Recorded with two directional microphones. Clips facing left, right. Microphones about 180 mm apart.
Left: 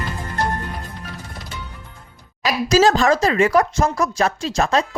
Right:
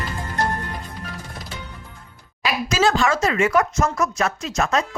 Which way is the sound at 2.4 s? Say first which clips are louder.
Left 5 dB; 40° left (ahead or behind).